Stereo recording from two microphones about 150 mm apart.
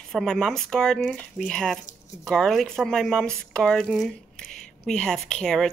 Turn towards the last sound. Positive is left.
turn(degrees=5)  # may be behind; listen again after turning